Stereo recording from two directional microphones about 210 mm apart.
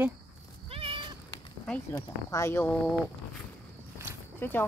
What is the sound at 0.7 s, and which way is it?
Cat, 25° right (ahead or behind).